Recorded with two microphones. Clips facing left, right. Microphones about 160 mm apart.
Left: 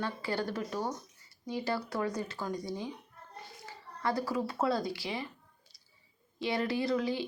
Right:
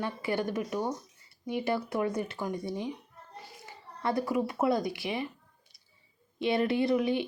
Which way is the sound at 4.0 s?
25° right (ahead or behind).